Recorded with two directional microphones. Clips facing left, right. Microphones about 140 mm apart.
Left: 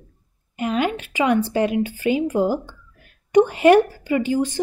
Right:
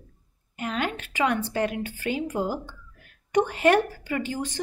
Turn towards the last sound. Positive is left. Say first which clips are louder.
# left 9 dB
turn(degrees=10)  # may be behind; listen again after turning